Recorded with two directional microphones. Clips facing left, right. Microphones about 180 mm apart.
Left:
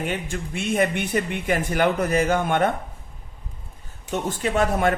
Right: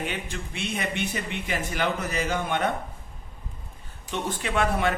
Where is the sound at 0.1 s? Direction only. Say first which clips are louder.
Left 5 dB; 50° left (ahead or behind).